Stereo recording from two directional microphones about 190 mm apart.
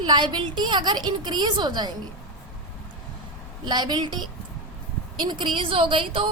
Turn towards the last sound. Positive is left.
turn(degrees=-30)  # may be behind; listen again after turning